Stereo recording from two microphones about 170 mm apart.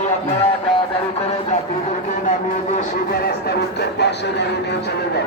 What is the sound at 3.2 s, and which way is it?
Speech, 70° left (ahead or behind).